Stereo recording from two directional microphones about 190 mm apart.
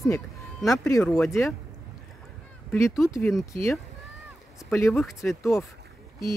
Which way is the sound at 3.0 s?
15° left (ahead or behind).